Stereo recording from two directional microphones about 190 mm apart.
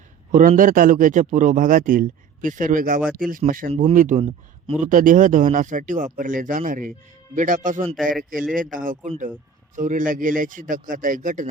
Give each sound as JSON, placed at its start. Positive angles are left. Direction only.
{"t": 0.3, "sound": "a man's voice", "side_deg": -45}